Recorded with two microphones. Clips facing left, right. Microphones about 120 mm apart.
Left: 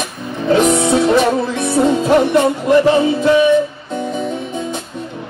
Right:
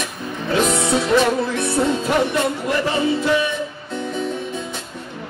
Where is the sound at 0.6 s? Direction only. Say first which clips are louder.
Left 5 dB; 20° left (ahead or behind).